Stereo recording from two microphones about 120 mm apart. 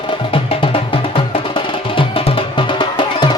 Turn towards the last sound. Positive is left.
turn(degrees=40)  # may be behind; listen again after turning